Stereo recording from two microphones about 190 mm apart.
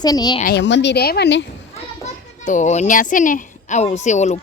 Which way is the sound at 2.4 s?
40° left (ahead or behind).